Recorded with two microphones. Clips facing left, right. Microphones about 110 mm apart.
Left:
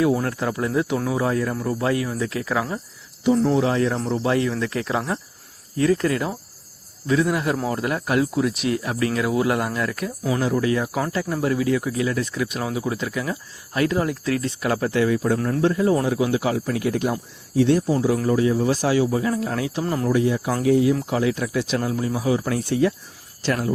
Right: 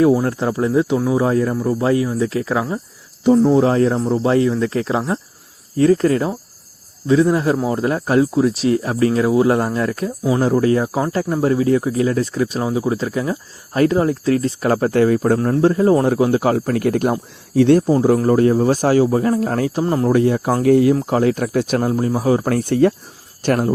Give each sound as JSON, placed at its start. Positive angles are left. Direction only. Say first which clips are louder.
{"t": 0.0, "sound": "speech", "louder": "right 6 dB", "side_deg": -25}
{"t": 3.6, "sound": "speech", "louder": "right 6 dB", "side_deg": -35}
{"t": 10.4, "sound": "speech", "louder": "right 6 dB", "side_deg": -35}
{"t": 15.4, "sound": "speech", "louder": "right 5 dB", "side_deg": -35}
{"t": 19.8, "sound": "speech", "louder": "right 6 dB", "side_deg": -30}
{"t": 20.1, "sound": "speech", "louder": "right 4 dB", "side_deg": -55}